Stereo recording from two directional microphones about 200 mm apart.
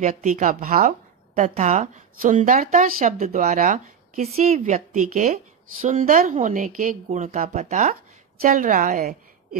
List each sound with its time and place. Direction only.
0.0 s speech: 40° right (ahead or behind)